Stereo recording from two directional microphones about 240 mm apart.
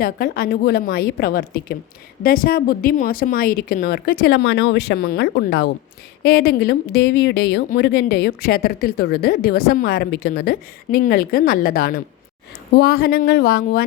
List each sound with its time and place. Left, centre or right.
0.0 s a woman's voice: left